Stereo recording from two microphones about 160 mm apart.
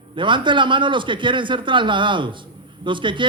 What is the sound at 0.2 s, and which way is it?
Speech, 30° right (ahead or behind).